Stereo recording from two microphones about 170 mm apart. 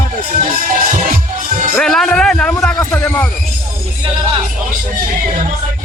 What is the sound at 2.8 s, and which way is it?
Heart sounds, 15° left (ahead or behind).